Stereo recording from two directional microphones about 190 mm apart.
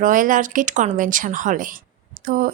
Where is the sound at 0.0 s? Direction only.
45° right (ahead or behind).